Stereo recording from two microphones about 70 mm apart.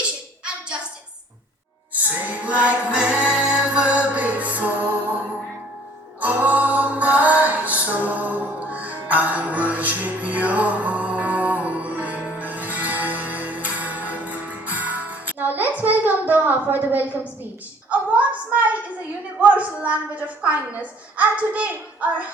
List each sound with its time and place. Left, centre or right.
1.9 s a capella: right
6.1 s music: right
18.1 s a sound: right
19.4 s a woman's voice: right